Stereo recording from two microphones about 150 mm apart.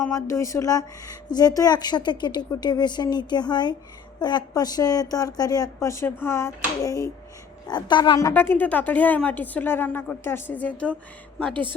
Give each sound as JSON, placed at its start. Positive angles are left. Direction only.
{"t": 0.1, "sound": "speech", "side_deg": 20}
{"t": 8.3, "sound": "speech", "side_deg": 15}